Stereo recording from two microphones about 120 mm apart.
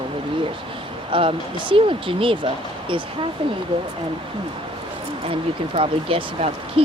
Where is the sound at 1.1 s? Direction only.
45° right (ahead or behind).